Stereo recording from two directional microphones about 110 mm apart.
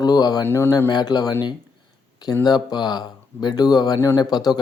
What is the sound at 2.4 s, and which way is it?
Speech, 40° left (ahead or behind).